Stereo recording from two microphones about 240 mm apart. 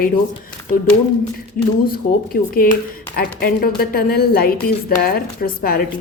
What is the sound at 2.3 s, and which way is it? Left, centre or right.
A woman's voice, left.